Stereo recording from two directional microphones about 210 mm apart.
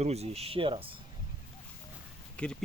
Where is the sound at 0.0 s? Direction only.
30° right (ahead or behind).